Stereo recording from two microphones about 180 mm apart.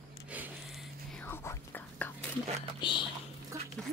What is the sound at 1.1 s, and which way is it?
Whispering, 10° left (ahead or behind).